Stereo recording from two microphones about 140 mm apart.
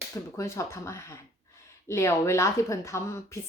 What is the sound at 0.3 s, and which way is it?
A woman's voice, 20° left (ahead or behind).